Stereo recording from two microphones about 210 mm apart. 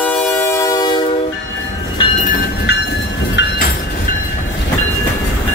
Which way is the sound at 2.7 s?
55° left (ahead or behind).